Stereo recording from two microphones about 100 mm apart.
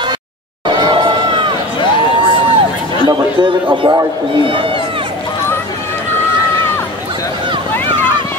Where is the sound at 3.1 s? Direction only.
50° right (ahead or behind).